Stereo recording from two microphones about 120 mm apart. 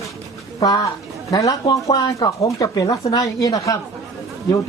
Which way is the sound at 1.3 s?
30° left (ahead or behind).